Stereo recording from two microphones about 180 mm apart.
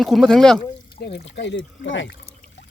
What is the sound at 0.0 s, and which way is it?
Speech, centre (ahead or behind).